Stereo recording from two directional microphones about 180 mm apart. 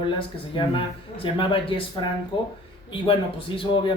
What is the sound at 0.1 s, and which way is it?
Speech, 30° left (ahead or behind).